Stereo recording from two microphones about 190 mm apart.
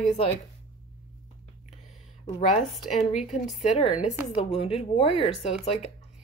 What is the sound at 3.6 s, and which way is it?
Speech, 35° left (ahead or behind).